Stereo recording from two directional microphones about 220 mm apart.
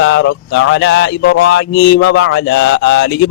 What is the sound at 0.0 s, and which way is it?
Speech, 55° left (ahead or behind).